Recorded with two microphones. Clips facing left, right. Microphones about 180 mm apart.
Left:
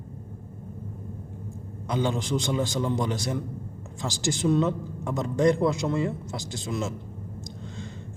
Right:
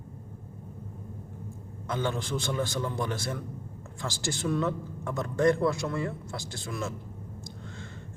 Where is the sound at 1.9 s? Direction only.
15° left (ahead or behind).